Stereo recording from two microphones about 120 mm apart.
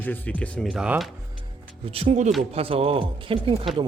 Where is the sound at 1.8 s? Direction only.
50° right (ahead or behind).